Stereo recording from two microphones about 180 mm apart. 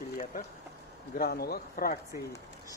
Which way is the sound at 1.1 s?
60° left (ahead or behind).